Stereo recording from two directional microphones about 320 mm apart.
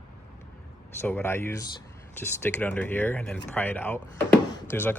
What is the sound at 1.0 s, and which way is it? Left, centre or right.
Speech, centre.